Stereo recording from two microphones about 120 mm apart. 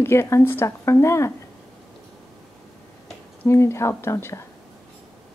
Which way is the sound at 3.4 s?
20° left (ahead or behind).